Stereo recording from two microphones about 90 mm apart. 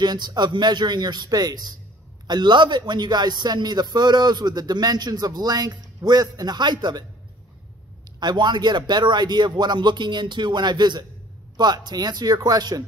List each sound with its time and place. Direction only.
0.0 s a man's voice: 50° right (ahead or behind)
8.2 s a man's voice: 55° right (ahead or behind)